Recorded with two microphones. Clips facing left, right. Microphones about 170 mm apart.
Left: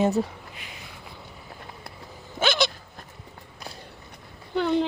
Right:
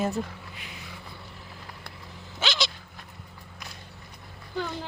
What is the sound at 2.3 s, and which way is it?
Dog, 55° left (ahead or behind).